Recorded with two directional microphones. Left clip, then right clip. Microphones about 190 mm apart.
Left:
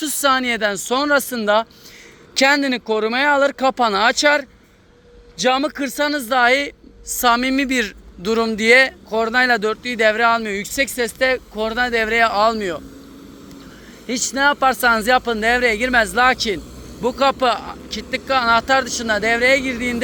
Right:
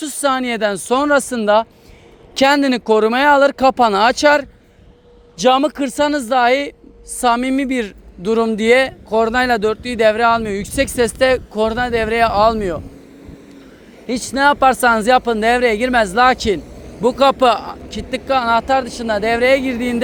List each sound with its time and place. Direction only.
0.0 s speech: 20° right (ahead or behind)
14.1 s speech: 25° right (ahead or behind)